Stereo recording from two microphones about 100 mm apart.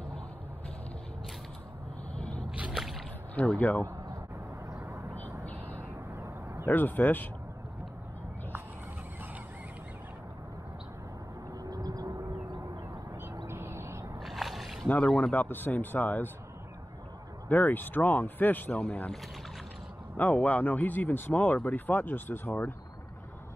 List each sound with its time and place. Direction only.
2.5 s a sound: 15° right (ahead or behind)
3.3 s speech: 15° left (ahead or behind)
6.6 s speech: 20° left (ahead or behind)
11.6 s vehicle: 40° right (ahead or behind)
13.5 s bird: 25° right (ahead or behind)
14.2 s a sound: centre (ahead or behind)
15.0 s speech: 5° left (ahead or behind)
15.3 s speech: 20° left (ahead or behind)
17.5 s speech: 20° left (ahead or behind)
20.2 s speech: 15° left (ahead or behind)